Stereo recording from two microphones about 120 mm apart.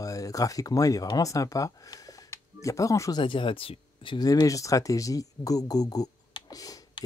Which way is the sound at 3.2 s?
45° left (ahead or behind).